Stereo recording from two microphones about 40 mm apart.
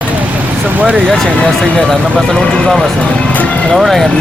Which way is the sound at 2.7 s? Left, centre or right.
Centre.